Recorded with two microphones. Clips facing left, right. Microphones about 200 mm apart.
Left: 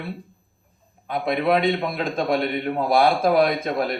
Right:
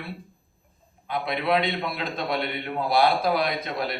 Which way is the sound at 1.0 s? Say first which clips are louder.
Left 4 dB; 45° left (ahead or behind).